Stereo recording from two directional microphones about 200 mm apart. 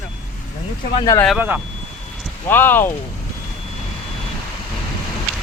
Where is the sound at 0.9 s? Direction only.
20° left (ahead or behind).